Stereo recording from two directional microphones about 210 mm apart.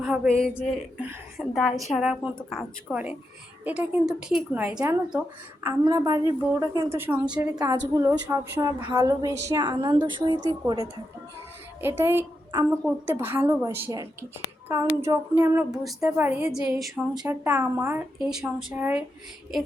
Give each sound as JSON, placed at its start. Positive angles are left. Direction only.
{"t": 0.0, "sound": "a woman's voice", "side_deg": 0}
{"t": 5.8, "sound": "a woman's voice", "side_deg": -15}
{"t": 11.8, "sound": "a woman's voice", "side_deg": -10}